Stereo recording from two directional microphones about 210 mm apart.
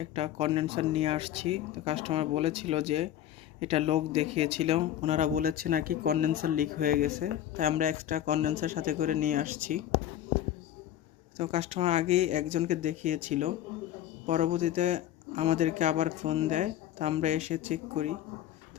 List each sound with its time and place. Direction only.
0.0 s speech: 25° right (ahead or behind)
11.3 s speech: 30° right (ahead or behind)